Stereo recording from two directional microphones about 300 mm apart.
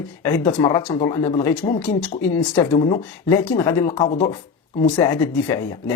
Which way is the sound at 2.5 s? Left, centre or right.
Centre.